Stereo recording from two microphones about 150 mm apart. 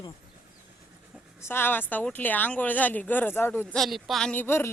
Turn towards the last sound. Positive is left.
turn(degrees=15)  # may be behind; listen again after turning